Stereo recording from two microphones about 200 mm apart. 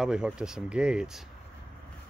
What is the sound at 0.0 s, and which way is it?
Speech, 5° right (ahead or behind).